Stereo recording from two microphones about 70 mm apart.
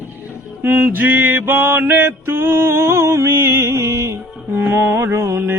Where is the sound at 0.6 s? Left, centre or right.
Right.